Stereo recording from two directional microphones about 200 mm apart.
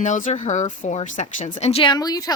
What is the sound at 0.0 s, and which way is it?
Speech, 35° left (ahead or behind).